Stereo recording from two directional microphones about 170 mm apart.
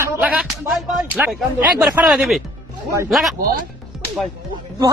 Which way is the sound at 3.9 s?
Centre (ahead or behind).